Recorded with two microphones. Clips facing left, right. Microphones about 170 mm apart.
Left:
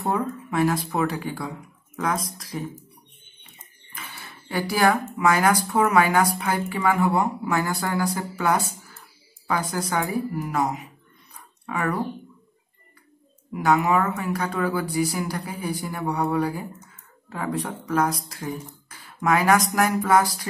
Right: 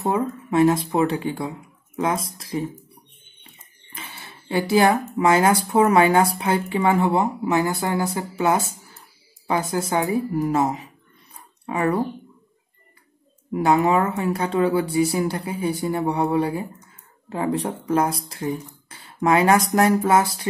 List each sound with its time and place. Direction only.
0.0 s speech: 20° right (ahead or behind)
3.9 s speech: 25° right (ahead or behind)
11.3 s a sound: 25° right (ahead or behind)
13.5 s speech: 30° right (ahead or behind)